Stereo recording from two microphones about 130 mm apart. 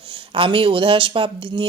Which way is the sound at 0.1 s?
40° right (ahead or behind).